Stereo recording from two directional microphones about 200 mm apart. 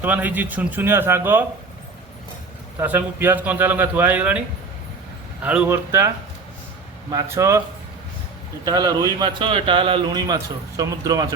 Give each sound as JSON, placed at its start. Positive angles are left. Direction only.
{"t": 0.0, "sound": "a man's voice", "side_deg": -10}
{"t": 2.7, "sound": "a man's voice", "side_deg": -10}
{"t": 7.1, "sound": "a man's voice", "side_deg": -15}
{"t": 8.6, "sound": "a man's voice", "side_deg": -20}